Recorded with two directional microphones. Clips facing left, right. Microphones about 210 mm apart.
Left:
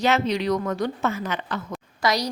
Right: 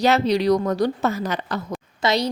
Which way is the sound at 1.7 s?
25° right (ahead or behind).